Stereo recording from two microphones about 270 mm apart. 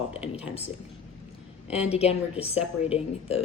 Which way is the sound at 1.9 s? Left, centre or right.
Left.